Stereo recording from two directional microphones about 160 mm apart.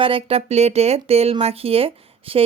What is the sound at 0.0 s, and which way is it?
Speech, 35° right (ahead or behind).